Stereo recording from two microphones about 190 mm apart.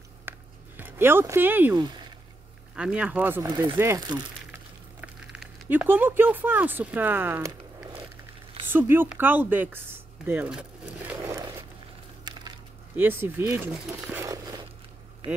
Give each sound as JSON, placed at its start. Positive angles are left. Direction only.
{"t": 0.2, "sound": "a sound", "side_deg": -10}
{"t": 1.8, "sound": "speech", "side_deg": -20}
{"t": 2.7, "sound": "speech", "side_deg": -5}
{"t": 8.6, "sound": "speech", "side_deg": -10}
{"t": 12.9, "sound": "speech", "side_deg": -10}
{"t": 14.2, "sound": "crumpling", "side_deg": -20}
{"t": 15.2, "sound": "speech", "side_deg": -25}